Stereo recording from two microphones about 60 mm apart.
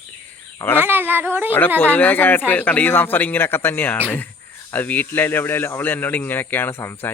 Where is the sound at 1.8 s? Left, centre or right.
Left.